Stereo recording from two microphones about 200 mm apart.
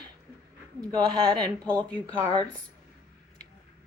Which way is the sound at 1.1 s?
5° left (ahead or behind).